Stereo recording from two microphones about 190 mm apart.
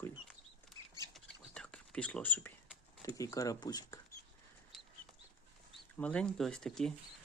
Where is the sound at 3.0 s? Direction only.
15° left (ahead or behind).